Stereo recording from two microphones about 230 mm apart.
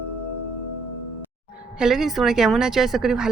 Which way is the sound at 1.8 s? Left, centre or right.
Centre.